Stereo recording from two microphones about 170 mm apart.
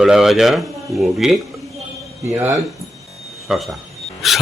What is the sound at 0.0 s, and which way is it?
A man's voice, centre (ahead or behind).